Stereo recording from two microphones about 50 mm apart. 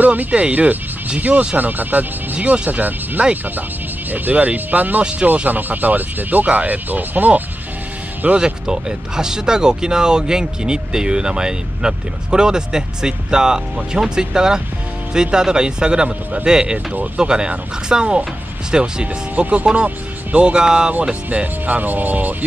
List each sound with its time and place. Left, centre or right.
0.0 s speech: right
1.6 s speech: right
2.3 s speech: right
8.4 s speech: centre
16.7 s speech: right
17.2 s speech: centre
19.3 s speech: right
21.3 s speech: right